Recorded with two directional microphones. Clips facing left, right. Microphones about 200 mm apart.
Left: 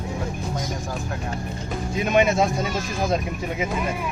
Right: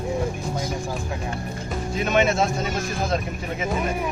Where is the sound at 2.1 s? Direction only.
15° left (ahead or behind).